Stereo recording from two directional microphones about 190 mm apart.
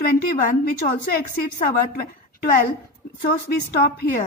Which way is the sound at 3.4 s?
55° left (ahead or behind).